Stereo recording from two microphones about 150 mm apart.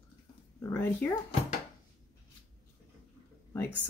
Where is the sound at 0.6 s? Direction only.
15° left (ahead or behind).